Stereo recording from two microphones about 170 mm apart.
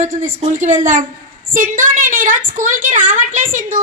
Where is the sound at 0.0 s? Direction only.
50° right (ahead or behind).